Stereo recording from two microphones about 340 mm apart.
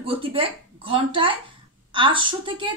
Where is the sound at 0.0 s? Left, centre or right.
Centre.